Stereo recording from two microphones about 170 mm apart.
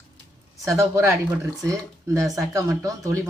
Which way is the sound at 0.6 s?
15° right (ahead or behind).